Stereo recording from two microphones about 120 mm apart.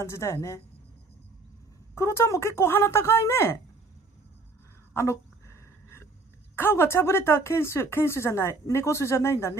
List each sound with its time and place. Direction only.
0.0 s speech: 20° left (ahead or behind)
2.0 s speech: 20° left (ahead or behind)
4.9 s a sound: 20° left (ahead or behind)
6.5 s speech: 20° left (ahead or behind)